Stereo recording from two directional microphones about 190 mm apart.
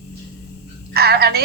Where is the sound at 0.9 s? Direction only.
55° right (ahead or behind).